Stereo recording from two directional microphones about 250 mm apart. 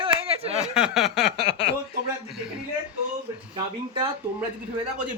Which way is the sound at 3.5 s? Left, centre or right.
Right.